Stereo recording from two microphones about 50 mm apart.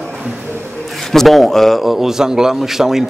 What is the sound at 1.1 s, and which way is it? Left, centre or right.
Speech, centre.